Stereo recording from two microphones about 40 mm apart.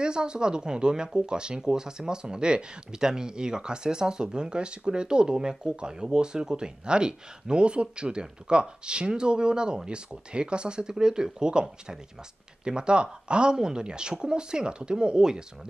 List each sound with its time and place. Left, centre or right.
0.0 s speech: right